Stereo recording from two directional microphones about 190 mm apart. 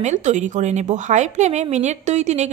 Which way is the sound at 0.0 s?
40° right (ahead or behind).